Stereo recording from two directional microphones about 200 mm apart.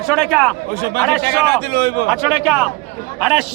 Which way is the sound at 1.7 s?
50° right (ahead or behind).